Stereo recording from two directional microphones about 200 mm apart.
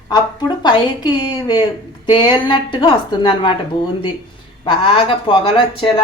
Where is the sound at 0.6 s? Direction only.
20° left (ahead or behind).